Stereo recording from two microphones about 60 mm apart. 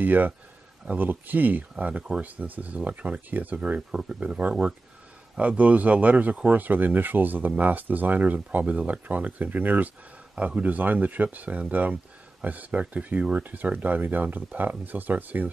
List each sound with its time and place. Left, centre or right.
0.0 s speech: right